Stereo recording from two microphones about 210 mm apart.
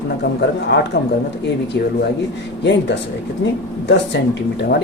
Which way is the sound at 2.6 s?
55° left (ahead or behind).